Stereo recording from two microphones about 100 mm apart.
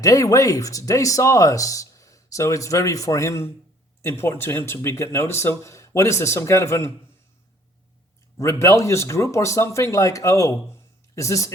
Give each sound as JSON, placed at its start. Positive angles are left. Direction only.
{"t": 0.0, "sound": "speech", "side_deg": 35}
{"t": 8.4, "sound": "speech", "side_deg": 30}